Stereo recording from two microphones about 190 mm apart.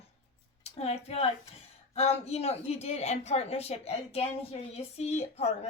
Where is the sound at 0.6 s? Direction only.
35° left (ahead or behind).